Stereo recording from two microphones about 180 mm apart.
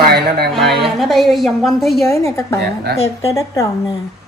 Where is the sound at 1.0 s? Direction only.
Centre (ahead or behind).